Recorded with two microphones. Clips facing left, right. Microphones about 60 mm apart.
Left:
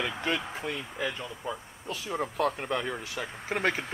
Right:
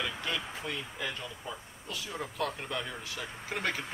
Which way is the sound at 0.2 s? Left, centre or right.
Left.